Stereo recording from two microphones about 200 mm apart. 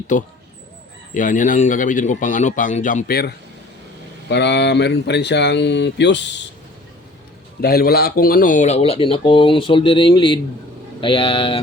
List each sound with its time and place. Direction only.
0.1 s speech: 40° left (ahead or behind); by 6.4 s 60° left (ahead or behind)
7.6 s speech: 50° left (ahead or behind); by 11.6 s 25° left (ahead or behind)